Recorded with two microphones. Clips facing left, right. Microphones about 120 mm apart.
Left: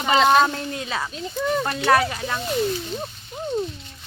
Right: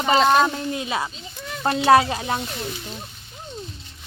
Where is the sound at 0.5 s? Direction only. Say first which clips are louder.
Right 2 dB; 15° right (ahead or behind).